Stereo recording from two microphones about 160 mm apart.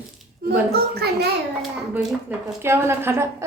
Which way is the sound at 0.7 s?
90° right.